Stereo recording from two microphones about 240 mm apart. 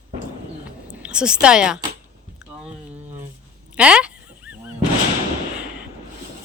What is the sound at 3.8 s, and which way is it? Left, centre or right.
Dog, centre.